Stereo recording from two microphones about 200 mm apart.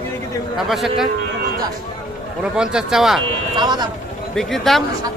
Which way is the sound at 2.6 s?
5° right (ahead or behind).